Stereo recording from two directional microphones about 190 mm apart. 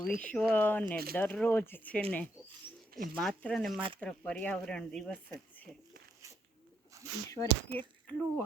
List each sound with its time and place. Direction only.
0.0 s speech: 5° left (ahead or behind)
3.8 s speech: 25° right (ahead or behind)
4.0 s speech: 5° left (ahead or behind)
7.3 s speech: 15° left (ahead or behind)